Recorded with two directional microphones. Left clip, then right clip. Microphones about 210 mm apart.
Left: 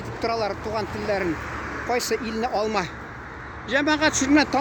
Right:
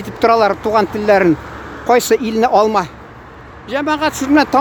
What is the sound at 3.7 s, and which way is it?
Speech, 10° right (ahead or behind).